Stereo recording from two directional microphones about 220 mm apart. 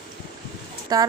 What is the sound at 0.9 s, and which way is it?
Speech, 15° right (ahead or behind).